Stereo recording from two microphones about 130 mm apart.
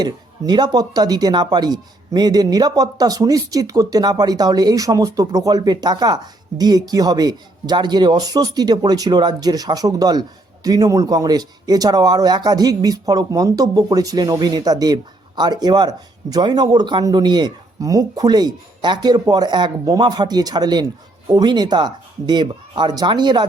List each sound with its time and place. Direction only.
0.0 s speech: 35° right (ahead or behind)